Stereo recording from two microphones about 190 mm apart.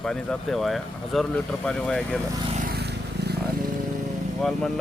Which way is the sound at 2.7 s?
60° right (ahead or behind).